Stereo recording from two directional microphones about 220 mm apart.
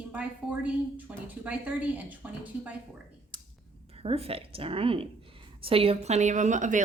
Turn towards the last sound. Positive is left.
turn(degrees=-35)  # may be behind; listen again after turning